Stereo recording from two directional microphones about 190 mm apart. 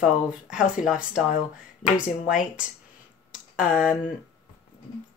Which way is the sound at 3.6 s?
5° right (ahead or behind).